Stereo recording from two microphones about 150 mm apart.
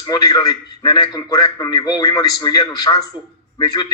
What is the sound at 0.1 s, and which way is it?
A man's voice, 25° left (ahead or behind).